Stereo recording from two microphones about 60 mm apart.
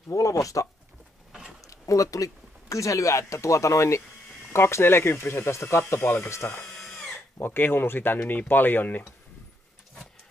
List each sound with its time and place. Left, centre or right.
0.1 s speech: left
6.6 s drill: centre
7.3 s speech: left